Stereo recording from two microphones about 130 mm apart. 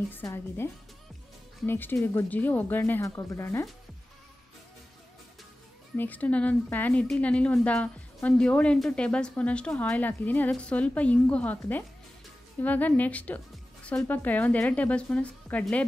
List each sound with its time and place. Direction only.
0.1 s a woman's voice: 15° left (ahead or behind)
1.7 s a woman's voice: 15° left (ahead or behind)
5.9 s a woman's voice: 10° left (ahead or behind)
12.6 s a woman's voice: 10° left (ahead or behind)